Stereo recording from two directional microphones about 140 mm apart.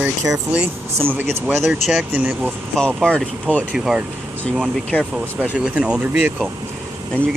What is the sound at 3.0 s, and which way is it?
Speech, 5° left (ahead or behind).